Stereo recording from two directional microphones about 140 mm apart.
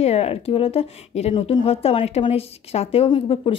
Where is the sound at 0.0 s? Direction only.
50° left (ahead or behind).